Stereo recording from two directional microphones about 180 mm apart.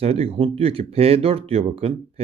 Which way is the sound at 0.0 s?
35° right (ahead or behind).